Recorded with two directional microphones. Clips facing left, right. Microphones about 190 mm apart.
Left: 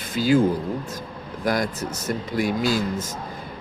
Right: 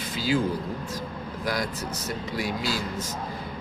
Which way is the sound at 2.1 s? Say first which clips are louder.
Left 7 dB; 50° left (ahead or behind).